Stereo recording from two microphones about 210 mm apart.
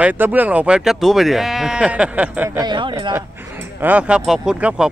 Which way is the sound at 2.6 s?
20° right (ahead or behind).